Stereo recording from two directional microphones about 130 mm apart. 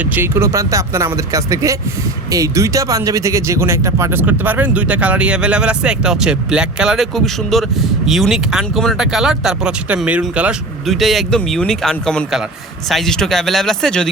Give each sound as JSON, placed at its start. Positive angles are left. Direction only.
{"t": 0.2, "sound": "speech", "side_deg": -20}